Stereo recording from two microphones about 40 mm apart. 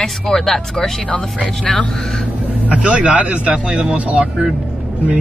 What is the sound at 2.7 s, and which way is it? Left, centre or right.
Speech, right.